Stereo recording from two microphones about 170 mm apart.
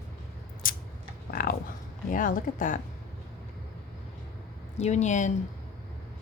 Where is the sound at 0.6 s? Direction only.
55° left (ahead or behind).